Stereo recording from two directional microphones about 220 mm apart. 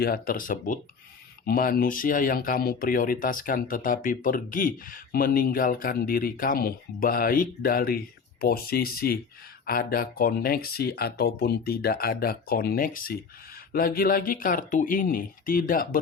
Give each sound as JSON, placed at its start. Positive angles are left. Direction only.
{"t": 0.0, "sound": "speech", "side_deg": 40}